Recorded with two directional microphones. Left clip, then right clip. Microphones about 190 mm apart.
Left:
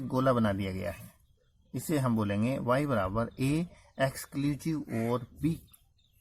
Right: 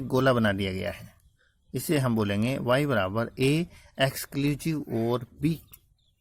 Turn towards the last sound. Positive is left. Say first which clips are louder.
# right 4 dB
turn(degrees=-30)  # may be behind; listen again after turning